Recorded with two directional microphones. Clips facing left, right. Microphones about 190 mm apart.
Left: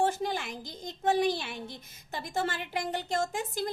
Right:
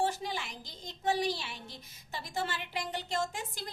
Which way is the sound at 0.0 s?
50° left (ahead or behind).